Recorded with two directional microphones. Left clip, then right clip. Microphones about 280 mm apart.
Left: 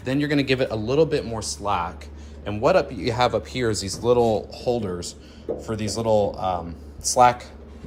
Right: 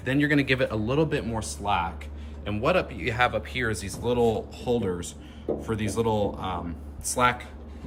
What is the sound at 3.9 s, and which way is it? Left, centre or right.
Speech, left.